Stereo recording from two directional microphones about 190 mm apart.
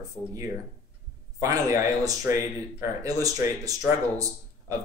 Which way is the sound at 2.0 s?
20° right (ahead or behind).